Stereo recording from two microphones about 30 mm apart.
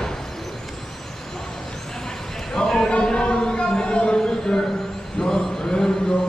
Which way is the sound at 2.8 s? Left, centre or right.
Left.